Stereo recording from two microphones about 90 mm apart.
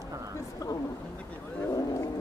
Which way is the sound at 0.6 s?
40° left (ahead or behind).